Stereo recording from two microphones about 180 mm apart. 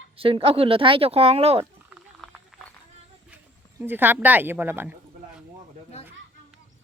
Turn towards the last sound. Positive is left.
turn(degrees=-10)  # may be behind; listen again after turning